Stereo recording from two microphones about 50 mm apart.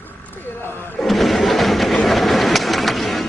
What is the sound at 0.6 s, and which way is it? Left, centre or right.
Speech, left.